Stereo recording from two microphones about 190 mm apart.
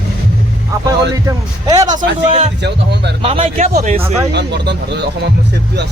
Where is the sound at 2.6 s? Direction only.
65° right (ahead or behind).